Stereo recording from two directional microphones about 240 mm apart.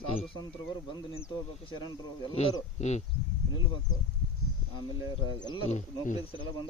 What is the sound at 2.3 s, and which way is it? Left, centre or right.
Speech, left.